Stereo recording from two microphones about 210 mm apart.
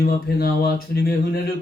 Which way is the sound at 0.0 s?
45° left (ahead or behind).